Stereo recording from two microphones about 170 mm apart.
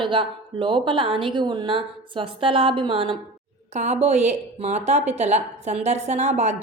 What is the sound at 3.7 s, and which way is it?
Speech, 40° right (ahead or behind).